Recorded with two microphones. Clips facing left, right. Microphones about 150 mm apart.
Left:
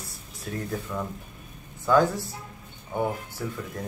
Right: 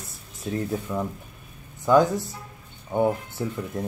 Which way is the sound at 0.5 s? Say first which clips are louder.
Right 4 dB; 20° right (ahead or behind).